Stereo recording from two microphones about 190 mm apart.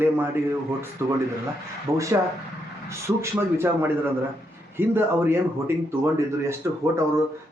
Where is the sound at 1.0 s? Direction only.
10° right (ahead or behind).